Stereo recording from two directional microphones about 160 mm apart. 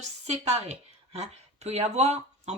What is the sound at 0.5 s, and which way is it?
Speech, 40° right (ahead or behind).